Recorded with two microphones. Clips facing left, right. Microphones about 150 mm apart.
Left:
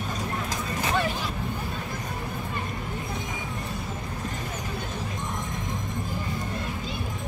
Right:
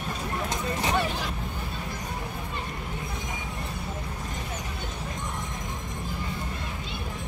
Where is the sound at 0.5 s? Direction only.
25° right (ahead or behind).